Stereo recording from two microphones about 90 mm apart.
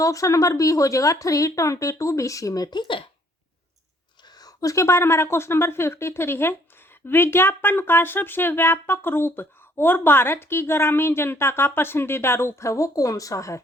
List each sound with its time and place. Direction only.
0.0 s speech: 40° left (ahead or behind); by 3.0 s 60° left (ahead or behind)
4.3 s speech: 45° left (ahead or behind)